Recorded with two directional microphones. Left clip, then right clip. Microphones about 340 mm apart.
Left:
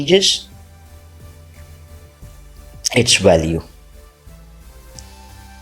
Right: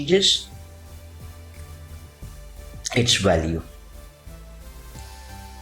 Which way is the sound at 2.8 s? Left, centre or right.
Centre.